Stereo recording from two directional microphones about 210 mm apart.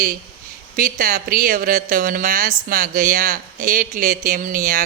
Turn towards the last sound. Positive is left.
turn(degrees=-40)  # may be behind; listen again after turning